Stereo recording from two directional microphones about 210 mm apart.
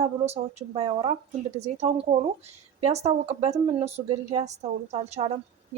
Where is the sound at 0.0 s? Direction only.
30° right (ahead or behind).